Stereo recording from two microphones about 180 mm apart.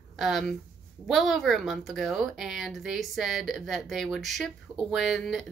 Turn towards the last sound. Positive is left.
turn(degrees=0)  # may be behind; listen again after turning